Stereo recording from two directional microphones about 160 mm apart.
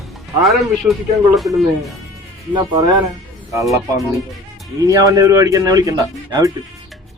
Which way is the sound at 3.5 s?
20° right (ahead or behind).